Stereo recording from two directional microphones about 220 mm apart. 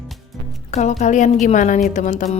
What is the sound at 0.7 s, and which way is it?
Speech, 30° left (ahead or behind).